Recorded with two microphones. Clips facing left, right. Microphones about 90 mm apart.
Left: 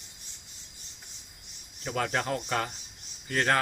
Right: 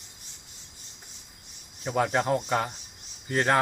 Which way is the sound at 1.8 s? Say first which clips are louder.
Right 5 dB; 20° right (ahead or behind).